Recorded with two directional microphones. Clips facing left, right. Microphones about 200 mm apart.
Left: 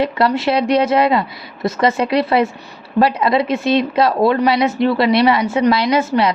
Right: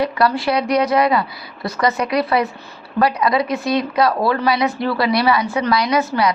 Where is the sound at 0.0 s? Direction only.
25° left (ahead or behind).